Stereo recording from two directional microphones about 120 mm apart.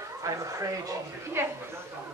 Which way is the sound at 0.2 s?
25° right (ahead or behind).